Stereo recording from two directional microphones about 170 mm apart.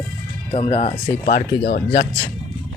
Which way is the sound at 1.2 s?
55° left (ahead or behind).